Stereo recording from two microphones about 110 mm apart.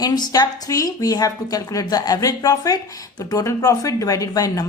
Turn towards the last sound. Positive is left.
turn(degrees=35)  # may be behind; listen again after turning